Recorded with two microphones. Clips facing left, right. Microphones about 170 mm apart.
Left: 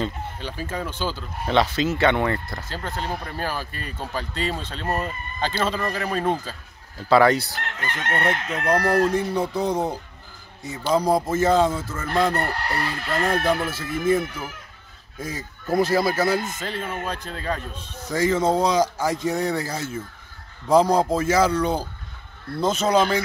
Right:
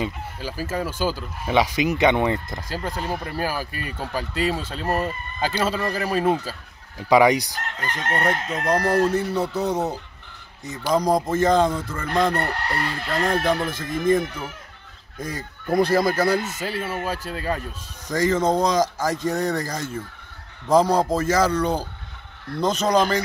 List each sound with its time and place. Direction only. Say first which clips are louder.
0.0 s speech: even; 5° right (ahead or behind)
8.0 s chicken: right 1 dB; 40° right (ahead or behind)
8.6 s speech: even; 10° right (ahead or behind)
9.1 s speech: even; 10° left (ahead or behind)
11.0 s speech: right 1 dB; 10° left (ahead or behind)
16.4 s speech: right 2 dB; 10° right (ahead or behind)
18.0 s speech: even; 10° left (ahead or behind)